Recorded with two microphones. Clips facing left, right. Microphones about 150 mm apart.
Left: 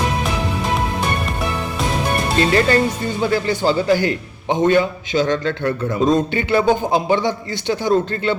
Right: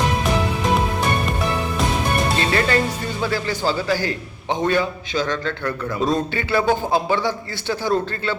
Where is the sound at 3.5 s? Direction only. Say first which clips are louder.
Left 5 dB; 20° left (ahead or behind).